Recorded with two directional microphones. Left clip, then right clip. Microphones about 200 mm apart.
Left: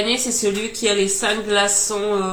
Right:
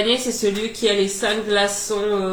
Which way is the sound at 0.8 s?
25° left (ahead or behind).